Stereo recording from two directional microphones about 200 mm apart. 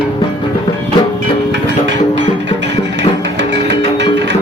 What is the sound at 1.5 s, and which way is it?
Music, 65° right (ahead or behind).